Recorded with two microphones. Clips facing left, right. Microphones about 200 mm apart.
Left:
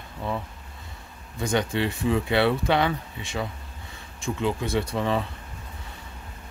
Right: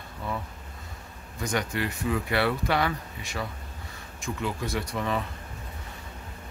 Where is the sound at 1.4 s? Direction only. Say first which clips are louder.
Left 4 dB; 25° left (ahead or behind).